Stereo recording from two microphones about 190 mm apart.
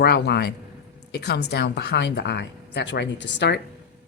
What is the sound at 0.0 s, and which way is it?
A woman's voice, 55° left (ahead or behind).